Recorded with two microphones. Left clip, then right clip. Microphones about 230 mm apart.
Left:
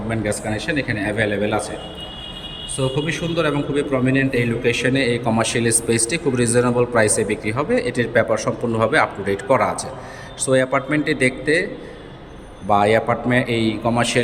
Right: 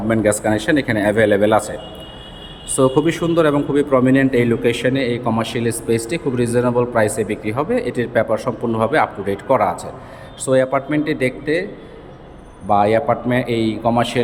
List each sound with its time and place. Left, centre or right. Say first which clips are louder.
0.1 s a man's voice: right 8 dB; centre
2.7 s a man's voice: right 7 dB; centre